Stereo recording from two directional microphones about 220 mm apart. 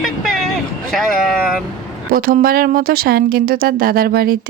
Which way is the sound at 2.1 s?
40° right (ahead or behind).